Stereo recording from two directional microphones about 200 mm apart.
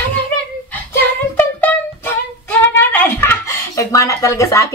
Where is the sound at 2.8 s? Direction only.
10° left (ahead or behind).